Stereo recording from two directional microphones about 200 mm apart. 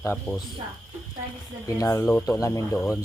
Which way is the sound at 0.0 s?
10° left (ahead or behind).